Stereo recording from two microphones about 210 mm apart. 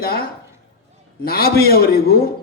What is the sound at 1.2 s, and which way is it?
Speech, 45° left (ahead or behind).